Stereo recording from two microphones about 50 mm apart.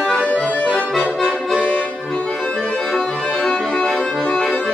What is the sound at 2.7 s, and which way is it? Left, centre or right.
Accordion, centre.